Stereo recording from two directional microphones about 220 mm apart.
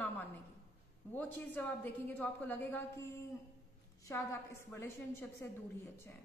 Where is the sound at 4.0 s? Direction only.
10° left (ahead or behind).